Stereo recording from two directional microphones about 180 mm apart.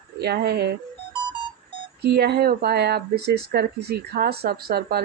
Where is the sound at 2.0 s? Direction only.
65° right (ahead or behind).